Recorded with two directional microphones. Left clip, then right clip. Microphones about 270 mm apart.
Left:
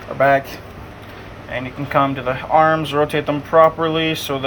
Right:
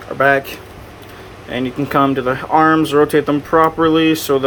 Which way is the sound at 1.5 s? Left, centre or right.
Right.